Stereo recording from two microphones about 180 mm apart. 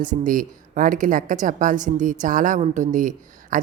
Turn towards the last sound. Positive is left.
turn(degrees=-45)  # may be behind; listen again after turning